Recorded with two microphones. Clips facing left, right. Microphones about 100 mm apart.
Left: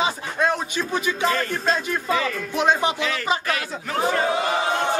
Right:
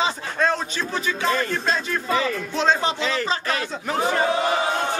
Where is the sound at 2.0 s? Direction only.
20° right (ahead or behind).